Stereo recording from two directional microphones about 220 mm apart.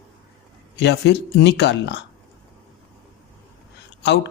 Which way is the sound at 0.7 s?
50° left (ahead or behind).